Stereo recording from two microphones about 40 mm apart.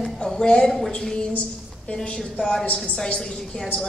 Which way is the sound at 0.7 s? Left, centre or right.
Centre.